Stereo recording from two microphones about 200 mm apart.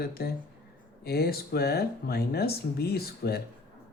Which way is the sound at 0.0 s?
50° left (ahead or behind).